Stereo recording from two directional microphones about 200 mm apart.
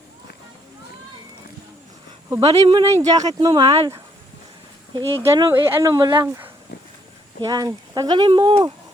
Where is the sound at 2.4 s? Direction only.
25° right (ahead or behind).